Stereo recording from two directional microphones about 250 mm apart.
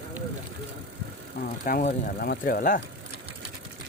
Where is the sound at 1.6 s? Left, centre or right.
Left.